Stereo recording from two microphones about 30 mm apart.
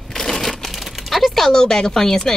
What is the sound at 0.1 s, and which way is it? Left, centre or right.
Crumpling, centre.